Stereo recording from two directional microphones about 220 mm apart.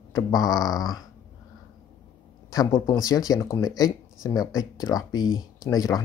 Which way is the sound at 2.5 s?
20° left (ahead or behind).